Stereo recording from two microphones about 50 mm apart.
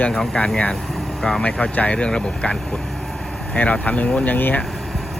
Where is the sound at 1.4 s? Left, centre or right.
Left.